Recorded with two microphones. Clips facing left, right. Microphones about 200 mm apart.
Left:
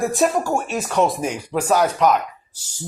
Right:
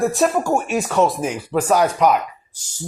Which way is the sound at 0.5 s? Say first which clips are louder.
Right 3 dB; 15° right (ahead or behind).